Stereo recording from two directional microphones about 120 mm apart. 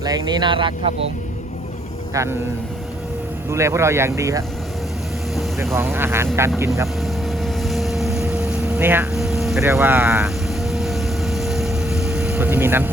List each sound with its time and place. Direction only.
0.0 s speech: 30° right (ahead or behind)
2.2 s speech: 25° right (ahead or behind)
3.5 s speech: 25° right (ahead or behind)
5.7 s speech: 20° right (ahead or behind)
7.0 s vehicle: centre (ahead or behind); by 9.0 s 15° right (ahead or behind)
9.1 s vehicle: 5° right (ahead or behind)
9.6 s speech: 20° right (ahead or behind)
10.2 s vehicle: centre (ahead or behind); by 12.9 s 15° right (ahead or behind)